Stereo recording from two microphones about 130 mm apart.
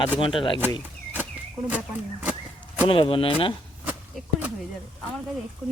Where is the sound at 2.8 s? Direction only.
40° left (ahead or behind).